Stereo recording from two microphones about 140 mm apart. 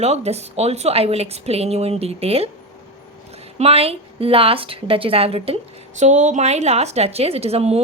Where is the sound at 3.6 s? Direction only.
45° right (ahead or behind).